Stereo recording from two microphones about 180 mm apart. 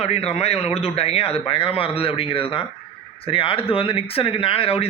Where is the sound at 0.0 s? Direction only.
35° left (ahead or behind).